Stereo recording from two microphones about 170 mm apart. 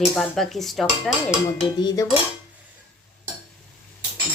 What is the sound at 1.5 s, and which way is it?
Dishes, 20° left (ahead or behind).